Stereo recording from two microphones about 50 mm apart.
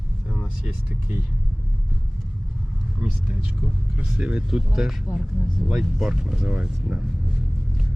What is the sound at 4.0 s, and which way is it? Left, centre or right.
Speech, right.